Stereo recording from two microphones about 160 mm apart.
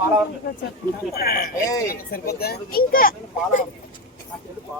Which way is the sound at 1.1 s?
70° left (ahead or behind).